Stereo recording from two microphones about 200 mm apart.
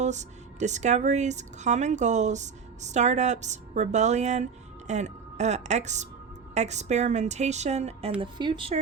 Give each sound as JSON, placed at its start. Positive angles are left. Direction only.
{"t": 0.0, "sound": "a woman's voice", "side_deg": -35}